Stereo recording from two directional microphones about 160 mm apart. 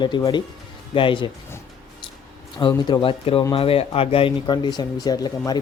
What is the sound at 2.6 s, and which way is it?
Speech, 30° left (ahead or behind).